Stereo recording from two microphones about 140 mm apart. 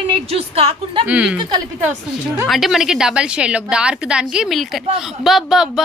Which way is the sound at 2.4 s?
Centre (ahead or behind).